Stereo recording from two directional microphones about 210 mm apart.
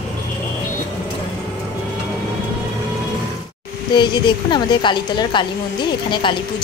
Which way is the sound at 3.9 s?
20° left (ahead or behind).